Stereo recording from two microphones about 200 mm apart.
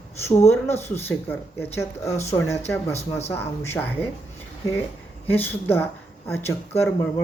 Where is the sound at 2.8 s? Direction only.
30° left (ahead or behind).